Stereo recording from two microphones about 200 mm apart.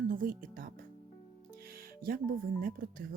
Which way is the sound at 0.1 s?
45° right (ahead or behind).